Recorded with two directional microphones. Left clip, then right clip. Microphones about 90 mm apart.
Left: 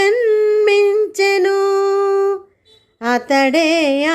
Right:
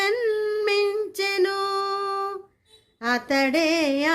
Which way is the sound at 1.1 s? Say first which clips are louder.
Left 9 dB; 45° left (ahead or behind).